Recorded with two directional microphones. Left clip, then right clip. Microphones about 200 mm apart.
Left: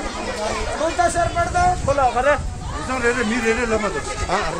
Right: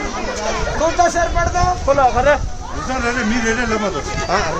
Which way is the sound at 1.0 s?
20° right (ahead or behind).